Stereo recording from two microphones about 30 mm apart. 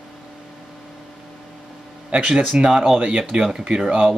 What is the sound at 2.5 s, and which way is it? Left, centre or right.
Speech, right.